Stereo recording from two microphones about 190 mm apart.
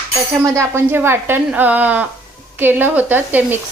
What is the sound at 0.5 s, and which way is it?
A woman's voice, 10° right (ahead or behind).